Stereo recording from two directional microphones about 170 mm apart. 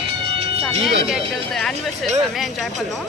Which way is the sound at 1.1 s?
Centre (ahead or behind).